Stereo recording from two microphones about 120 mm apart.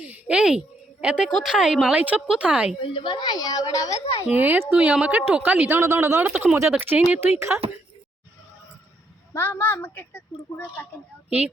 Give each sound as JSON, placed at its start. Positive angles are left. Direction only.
{"t": 0.0, "sound": "a sound", "side_deg": -10}
{"t": 1.0, "sound": "a woman's voice", "side_deg": -10}
{"t": 2.8, "sound": "a woman's voice", "side_deg": 45}
{"t": 4.3, "sound": "a woman's voice", "side_deg": -15}
{"t": 6.2, "sound": "a woman's voice", "side_deg": -10}
{"t": 9.3, "sound": "speech", "side_deg": 20}
{"t": 11.3, "sound": "a woman's voice", "side_deg": -10}